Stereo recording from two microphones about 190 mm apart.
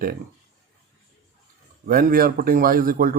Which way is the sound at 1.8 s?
50° right (ahead or behind).